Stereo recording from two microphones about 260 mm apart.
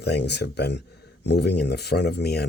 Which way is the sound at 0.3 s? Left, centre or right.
Left.